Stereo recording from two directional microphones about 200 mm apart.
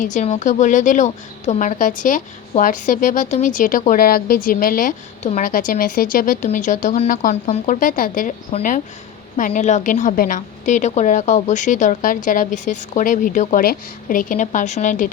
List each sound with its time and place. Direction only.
0.0 s a woman's voice: 40° left (ahead or behind)